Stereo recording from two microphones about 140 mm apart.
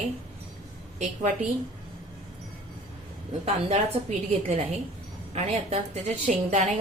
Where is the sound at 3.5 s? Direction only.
50° right (ahead or behind).